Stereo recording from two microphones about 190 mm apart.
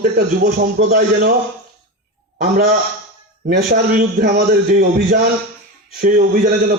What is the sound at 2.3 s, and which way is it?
A man's voice, 55° right (ahead or behind).